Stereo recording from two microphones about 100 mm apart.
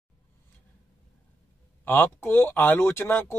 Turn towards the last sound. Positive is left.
turn(degrees=25)  # may be behind; listen again after turning